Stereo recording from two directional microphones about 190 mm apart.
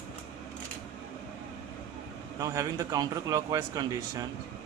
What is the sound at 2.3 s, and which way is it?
Speech, 20° right (ahead or behind).